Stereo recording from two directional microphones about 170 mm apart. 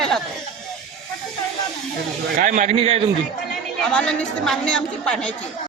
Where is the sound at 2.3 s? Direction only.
50° right (ahead or behind).